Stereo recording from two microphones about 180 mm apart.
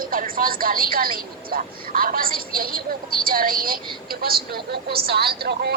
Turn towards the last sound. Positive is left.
turn(degrees=-65)  # may be behind; listen again after turning